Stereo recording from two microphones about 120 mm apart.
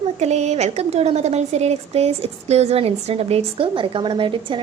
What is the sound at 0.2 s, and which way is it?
A woman's voice, 65° right (ahead or behind).